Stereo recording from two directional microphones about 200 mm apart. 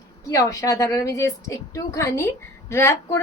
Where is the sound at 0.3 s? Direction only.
15° left (ahead or behind).